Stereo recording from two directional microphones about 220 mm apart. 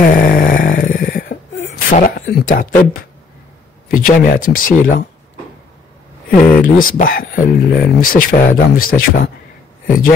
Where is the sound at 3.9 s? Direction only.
40° left (ahead or behind).